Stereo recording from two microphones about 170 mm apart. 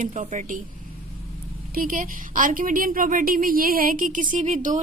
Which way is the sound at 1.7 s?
55° right (ahead or behind).